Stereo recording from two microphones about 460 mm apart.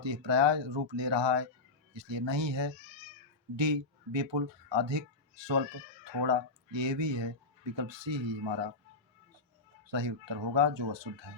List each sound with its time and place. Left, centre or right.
0.0 s speech: right
9.8 s speech: right